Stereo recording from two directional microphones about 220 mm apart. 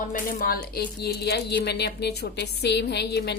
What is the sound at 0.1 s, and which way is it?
A woman's voice, 40° left (ahead or behind).